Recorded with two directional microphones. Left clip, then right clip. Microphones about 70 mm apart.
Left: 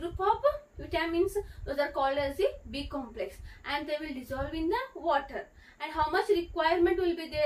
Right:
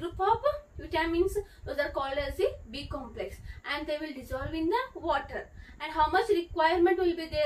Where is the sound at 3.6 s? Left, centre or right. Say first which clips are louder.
Even; left.